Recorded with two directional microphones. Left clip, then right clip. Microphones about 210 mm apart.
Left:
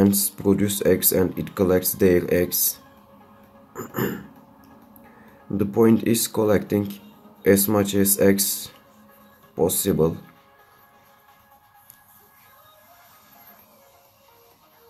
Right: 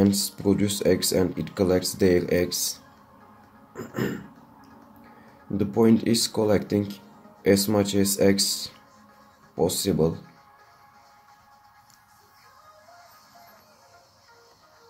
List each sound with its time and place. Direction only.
0.0 s speech: 15° left (ahead or behind)
5.6 s speech: 15° left (ahead or behind)